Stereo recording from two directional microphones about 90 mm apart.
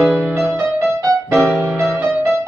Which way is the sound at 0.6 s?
30° right (ahead or behind).